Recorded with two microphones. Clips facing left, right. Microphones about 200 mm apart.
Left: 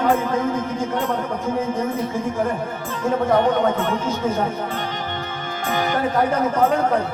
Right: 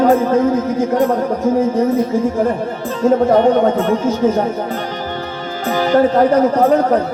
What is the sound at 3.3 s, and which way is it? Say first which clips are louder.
Music: right 6 dB; 35° right (ahead or behind).